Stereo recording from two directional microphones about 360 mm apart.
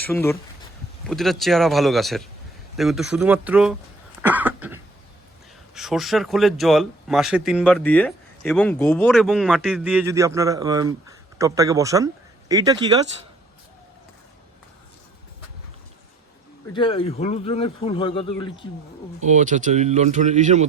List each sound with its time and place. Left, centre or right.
0.0 s speech: centre
4.3 s a sound: centre
5.7 s speech: centre
16.7 s speech: centre
19.2 s speech: centre